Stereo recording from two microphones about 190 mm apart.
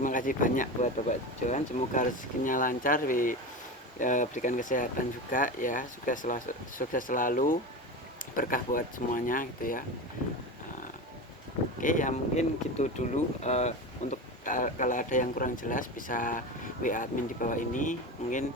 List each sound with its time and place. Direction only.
0.0 s speech: 45° left (ahead or behind)
11.8 s speech: 45° left (ahead or behind)